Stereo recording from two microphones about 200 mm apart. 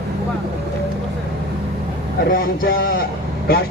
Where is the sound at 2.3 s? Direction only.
45° left (ahead or behind).